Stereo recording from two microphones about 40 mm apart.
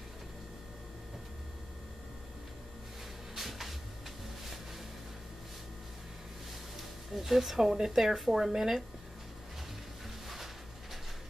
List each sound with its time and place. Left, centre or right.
3.3 s cupboard open or close: centre
6.8 s speech: centre
10.2 s a sound: centre